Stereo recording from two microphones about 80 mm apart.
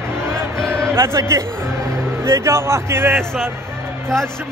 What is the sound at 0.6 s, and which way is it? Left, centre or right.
A man's voice, right.